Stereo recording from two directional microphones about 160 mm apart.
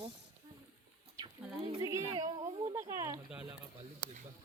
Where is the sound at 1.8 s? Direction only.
25° right (ahead or behind).